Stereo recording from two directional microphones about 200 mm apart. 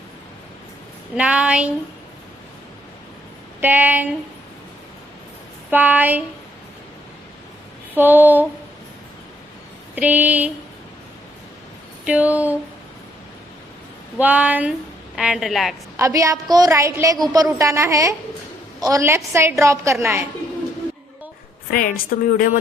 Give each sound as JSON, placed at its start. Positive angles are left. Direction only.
{"t": 1.1, "sound": "speech", "side_deg": -5}
{"t": 3.6, "sound": "a woman's voice", "side_deg": -10}
{"t": 5.7, "sound": "a woman's voice", "side_deg": -10}
{"t": 7.9, "sound": "a woman's voice", "side_deg": -10}
{"t": 9.9, "sound": "a woman's voice", "side_deg": -10}
{"t": 12.0, "sound": "a woman's voice", "side_deg": -5}
{"t": 14.2, "sound": "a woman's voice", "side_deg": -5}
{"t": 16.0, "sound": "a woman's voice", "side_deg": -15}
{"t": 21.7, "sound": "speech", "side_deg": 45}